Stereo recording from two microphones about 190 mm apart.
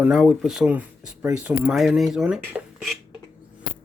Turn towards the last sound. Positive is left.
turn(degrees=0)  # may be behind; listen again after turning